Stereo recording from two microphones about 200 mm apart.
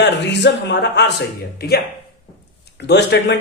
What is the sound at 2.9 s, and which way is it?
Speech, 60° left (ahead or behind).